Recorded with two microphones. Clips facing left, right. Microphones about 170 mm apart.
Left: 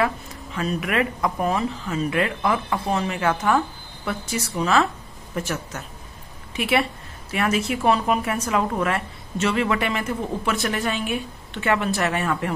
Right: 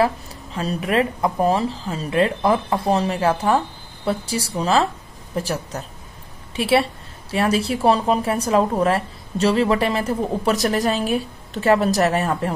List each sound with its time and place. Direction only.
0.0 s a woman's voice: 35° right (ahead or behind)